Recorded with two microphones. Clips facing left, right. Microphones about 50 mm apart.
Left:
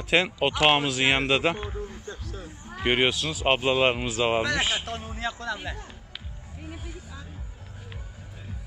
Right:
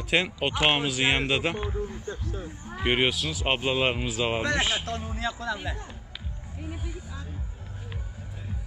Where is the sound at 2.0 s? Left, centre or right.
Centre.